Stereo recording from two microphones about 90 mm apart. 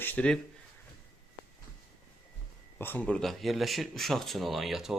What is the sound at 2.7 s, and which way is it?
Speech, 25° left (ahead or behind).